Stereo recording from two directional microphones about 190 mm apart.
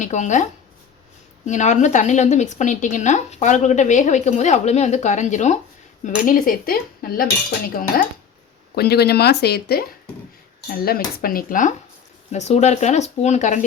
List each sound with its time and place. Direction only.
0.0 s speech: 40° left (ahead or behind)
1.5 s speech: 40° left (ahead or behind)